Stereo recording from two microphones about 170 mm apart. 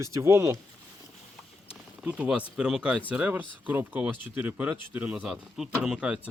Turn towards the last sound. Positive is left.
turn(degrees=-5)  # may be behind; listen again after turning